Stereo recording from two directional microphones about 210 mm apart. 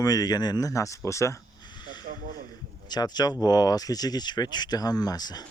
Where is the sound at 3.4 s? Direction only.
20° left (ahead or behind).